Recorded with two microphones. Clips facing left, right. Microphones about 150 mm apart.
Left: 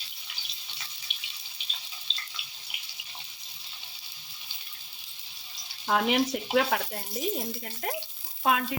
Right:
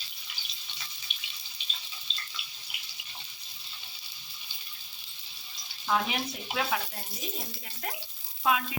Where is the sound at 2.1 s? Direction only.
30° left (ahead or behind).